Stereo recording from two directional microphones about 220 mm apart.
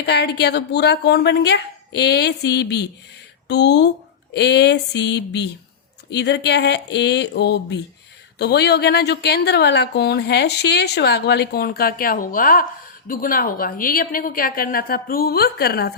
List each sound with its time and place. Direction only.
0.0 s a woman's voice: 50° left (ahead or behind)